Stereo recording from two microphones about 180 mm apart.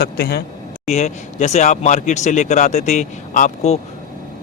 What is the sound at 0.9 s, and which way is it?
Speech, 40° left (ahead or behind).